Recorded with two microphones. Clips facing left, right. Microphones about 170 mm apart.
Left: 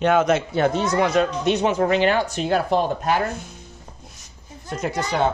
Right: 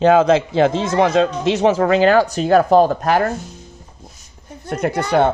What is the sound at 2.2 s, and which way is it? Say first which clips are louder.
Speech: right 7 dB; 40° right (ahead or behind).